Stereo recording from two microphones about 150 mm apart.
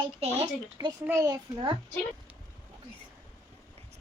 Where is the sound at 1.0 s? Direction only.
20° right (ahead or behind).